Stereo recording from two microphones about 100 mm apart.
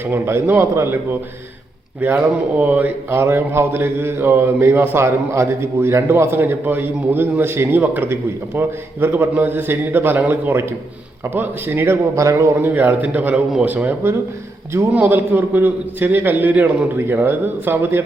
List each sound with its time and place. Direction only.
0.0 s speech: 25° right (ahead or behind)
2.0 s speech: 15° right (ahead or behind)